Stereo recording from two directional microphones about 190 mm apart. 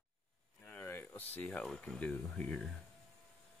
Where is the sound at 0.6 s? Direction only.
10° left (ahead or behind).